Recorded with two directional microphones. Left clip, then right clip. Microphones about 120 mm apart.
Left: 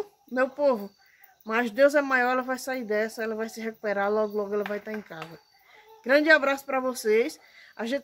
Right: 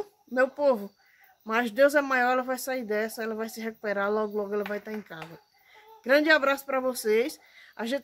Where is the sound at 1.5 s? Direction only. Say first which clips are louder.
Left 1 dB; 25° right (ahead or behind).